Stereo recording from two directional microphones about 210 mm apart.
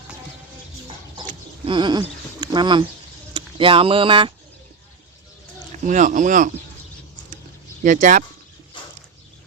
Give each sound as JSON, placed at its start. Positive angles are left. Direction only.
{"t": 1.3, "sound": "a sound", "side_deg": -25}
{"t": 3.3, "sound": "speech", "side_deg": -25}
{"t": 5.8, "sound": "speech", "side_deg": -35}
{"t": 7.9, "sound": "speech", "side_deg": -35}